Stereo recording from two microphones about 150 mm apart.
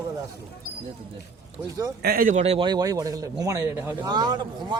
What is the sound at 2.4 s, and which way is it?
Speech, 35° right (ahead or behind).